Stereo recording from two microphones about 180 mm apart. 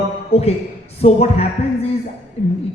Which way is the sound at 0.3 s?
35° left (ahead or behind).